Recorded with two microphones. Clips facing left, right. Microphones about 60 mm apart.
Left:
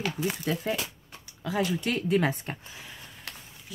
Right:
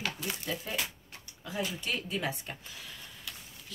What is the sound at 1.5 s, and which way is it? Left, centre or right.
Speech, left.